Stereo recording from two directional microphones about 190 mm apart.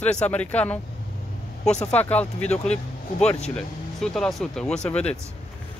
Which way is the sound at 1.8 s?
5° left (ahead or behind).